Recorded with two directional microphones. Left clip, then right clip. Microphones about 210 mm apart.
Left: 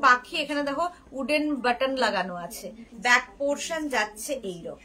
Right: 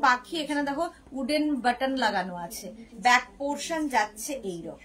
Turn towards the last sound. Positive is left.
turn(degrees=15)  # may be behind; listen again after turning